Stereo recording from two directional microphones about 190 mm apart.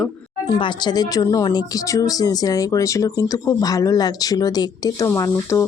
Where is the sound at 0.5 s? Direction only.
25° left (ahead or behind).